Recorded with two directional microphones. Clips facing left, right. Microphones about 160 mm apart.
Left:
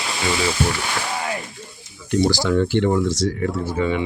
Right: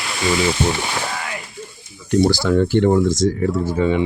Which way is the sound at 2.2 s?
50° right (ahead or behind).